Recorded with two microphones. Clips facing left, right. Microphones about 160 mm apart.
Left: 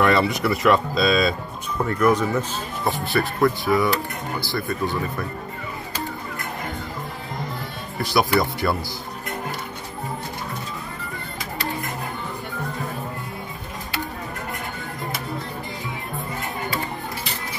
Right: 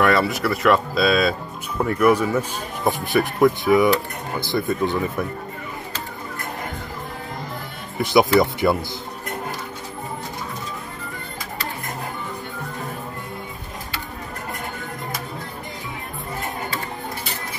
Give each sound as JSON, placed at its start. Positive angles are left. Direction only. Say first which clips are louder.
{"t": 0.0, "sound": "speech", "louder": "even", "side_deg": 0}
{"t": 8.0, "sound": "speech", "louder": "right 4 dB", "side_deg": -20}